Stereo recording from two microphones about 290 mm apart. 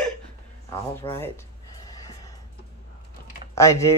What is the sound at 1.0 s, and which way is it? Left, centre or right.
Speech, centre.